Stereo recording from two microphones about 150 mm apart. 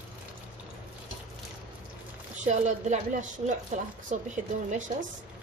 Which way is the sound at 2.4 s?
55° right (ahead or behind).